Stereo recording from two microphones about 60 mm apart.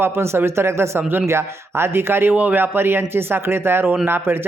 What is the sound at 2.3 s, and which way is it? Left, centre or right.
Speech, right.